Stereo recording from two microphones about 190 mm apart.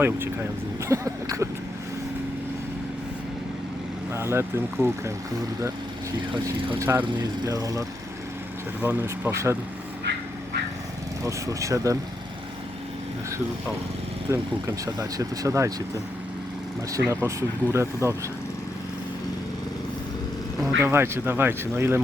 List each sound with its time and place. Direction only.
0.9 s speech: 15° right (ahead or behind)
4.1 s speech: 15° right (ahead or behind)
6.7 s speech: 15° right (ahead or behind)
11.2 s speech: 15° right (ahead or behind)
14.3 s speech: 15° right (ahead or behind)
16.9 s speech: 10° right (ahead or behind)
20.6 s speech: 10° right (ahead or behind)